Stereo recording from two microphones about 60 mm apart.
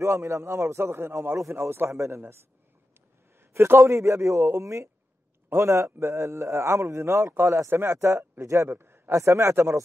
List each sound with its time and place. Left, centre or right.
0.0 s a man's voice: right
3.3 s a man's voice: right
8.6 s a sound: right
9.1 s a man's voice: right